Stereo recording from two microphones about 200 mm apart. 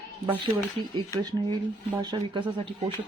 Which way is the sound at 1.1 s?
20° right (ahead or behind).